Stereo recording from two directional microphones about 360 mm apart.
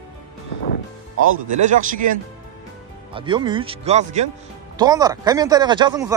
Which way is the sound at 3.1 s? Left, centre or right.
Centre.